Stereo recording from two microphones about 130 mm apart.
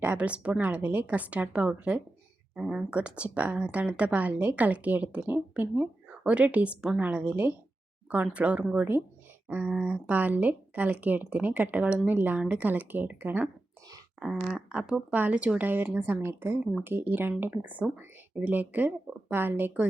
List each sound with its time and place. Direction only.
0.0 s speech: 10° right (ahead or behind)
14.5 s speech: 5° right (ahead or behind)